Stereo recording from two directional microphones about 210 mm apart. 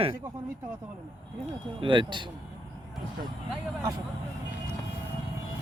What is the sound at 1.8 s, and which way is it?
Speech, 25° right (ahead or behind).